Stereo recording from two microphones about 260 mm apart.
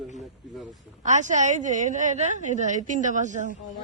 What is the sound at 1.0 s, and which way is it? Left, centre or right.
A woman's voice, right.